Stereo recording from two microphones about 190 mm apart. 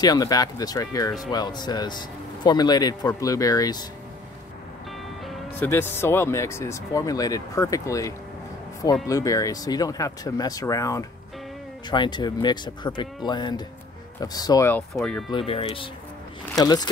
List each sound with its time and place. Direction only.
0.0 s a man's voice: 20° left (ahead or behind)
5.2 s music: centre (ahead or behind)
5.7 s a man's voice: 10° left (ahead or behind)
15.0 s speech: 5° left (ahead or behind)
15.3 s a man's voice: 30° left (ahead or behind)